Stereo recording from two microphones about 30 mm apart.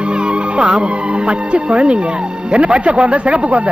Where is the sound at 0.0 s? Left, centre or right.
Right.